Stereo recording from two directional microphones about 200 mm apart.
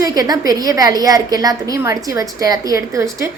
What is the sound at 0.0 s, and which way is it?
A woman's voice, 20° right (ahead or behind).